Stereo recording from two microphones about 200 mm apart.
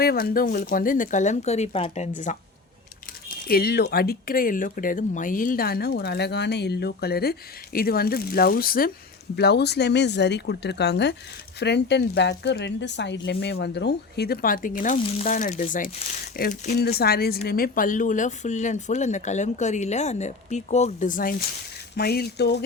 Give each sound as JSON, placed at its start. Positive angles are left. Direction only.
{"t": 0.0, "sound": "speech", "side_deg": 50}
{"t": 3.2, "sound": "speech", "side_deg": 50}